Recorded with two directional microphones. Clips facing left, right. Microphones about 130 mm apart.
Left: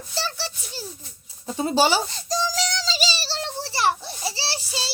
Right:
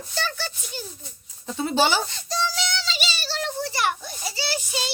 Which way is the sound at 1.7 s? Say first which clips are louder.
Left 2 dB; 35° left (ahead or behind).